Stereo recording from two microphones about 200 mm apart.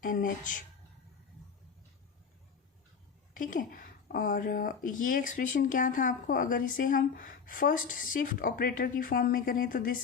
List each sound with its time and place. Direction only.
0.0 s speech: 45° left (ahead or behind)
3.3 s speech: 40° left (ahead or behind)